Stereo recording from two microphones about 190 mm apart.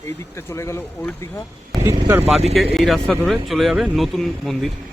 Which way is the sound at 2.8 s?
Centre (ahead or behind).